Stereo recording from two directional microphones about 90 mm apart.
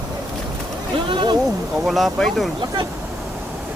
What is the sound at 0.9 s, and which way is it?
Speech, 65° right (ahead or behind).